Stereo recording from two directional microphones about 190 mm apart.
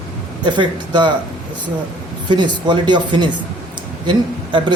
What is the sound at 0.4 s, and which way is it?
Speech, 25° right (ahead or behind).